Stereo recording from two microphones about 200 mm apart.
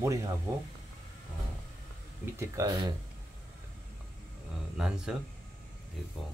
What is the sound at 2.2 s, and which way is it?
Speech, 15° right (ahead or behind).